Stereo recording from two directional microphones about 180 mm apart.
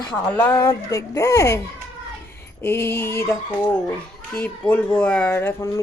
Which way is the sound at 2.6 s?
15° left (ahead or behind).